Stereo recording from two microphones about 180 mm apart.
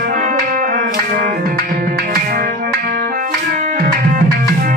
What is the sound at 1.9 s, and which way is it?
Music, 60° right (ahead or behind).